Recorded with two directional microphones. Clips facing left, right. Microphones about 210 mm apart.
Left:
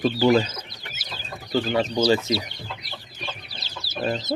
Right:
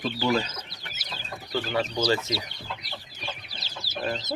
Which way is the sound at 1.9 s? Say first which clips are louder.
Left 5 dB; 20° left (ahead or behind).